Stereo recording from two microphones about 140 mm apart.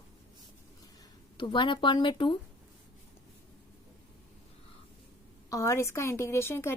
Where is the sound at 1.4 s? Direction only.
35° left (ahead or behind).